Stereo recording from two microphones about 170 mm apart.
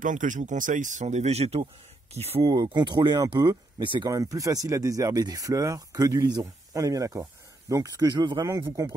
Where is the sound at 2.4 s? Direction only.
25° right (ahead or behind).